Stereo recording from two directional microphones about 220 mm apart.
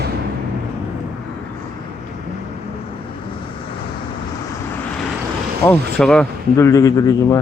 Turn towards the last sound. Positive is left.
turn(degrees=15)  # may be behind; listen again after turning